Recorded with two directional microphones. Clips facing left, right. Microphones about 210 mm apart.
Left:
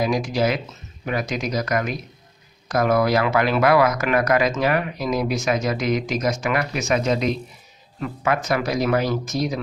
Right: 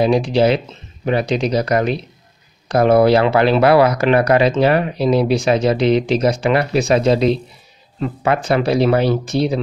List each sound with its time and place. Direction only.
0.0 s speech: 30° right (ahead or behind)